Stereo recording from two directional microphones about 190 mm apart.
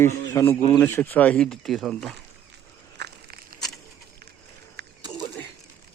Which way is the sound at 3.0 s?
55° right (ahead or behind).